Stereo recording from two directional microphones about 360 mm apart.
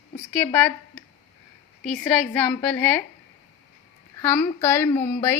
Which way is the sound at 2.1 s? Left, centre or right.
Centre.